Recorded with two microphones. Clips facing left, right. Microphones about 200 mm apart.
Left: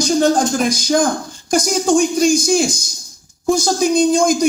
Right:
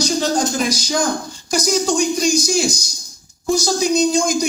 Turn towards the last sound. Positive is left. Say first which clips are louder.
# left 3 dB
turn(degrees=50)  # may be behind; listen again after turning